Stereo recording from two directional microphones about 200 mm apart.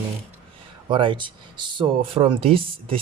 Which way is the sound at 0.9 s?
25° right (ahead or behind).